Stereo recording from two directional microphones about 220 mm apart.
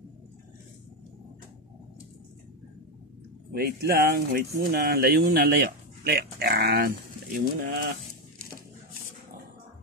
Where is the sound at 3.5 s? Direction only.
40° right (ahead or behind).